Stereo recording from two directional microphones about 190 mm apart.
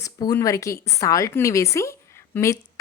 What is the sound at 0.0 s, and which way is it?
A woman's voice, 20° left (ahead or behind).